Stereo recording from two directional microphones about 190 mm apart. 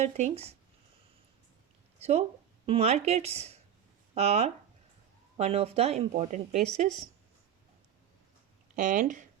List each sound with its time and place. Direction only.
0.0 s speech: 35° right (ahead or behind)
2.0 s speech: 35° right (ahead or behind)
8.7 s speech: 45° right (ahead or behind)